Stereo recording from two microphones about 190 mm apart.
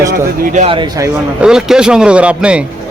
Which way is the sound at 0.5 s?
35° right (ahead or behind).